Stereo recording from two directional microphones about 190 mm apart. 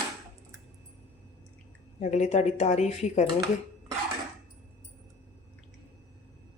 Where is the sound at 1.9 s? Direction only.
40° left (ahead or behind).